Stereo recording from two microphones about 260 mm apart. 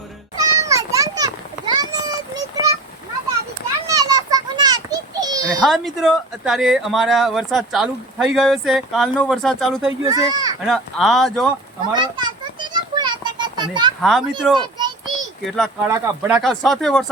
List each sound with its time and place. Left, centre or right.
0.3 s children playing: centre
1.7 s a sound: centre
3.8 s children playing: centre
5.5 s speech: centre
10.1 s speech: centre
10.7 s speech: centre
11.9 s a sound: centre
14.0 s speech: centre
14.5 s children playing: centre
15.4 s speech: centre